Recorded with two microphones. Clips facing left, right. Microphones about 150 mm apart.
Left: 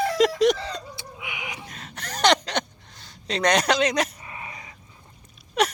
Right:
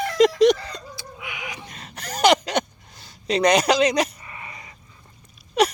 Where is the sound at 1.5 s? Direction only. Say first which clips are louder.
Even; centre (ahead or behind).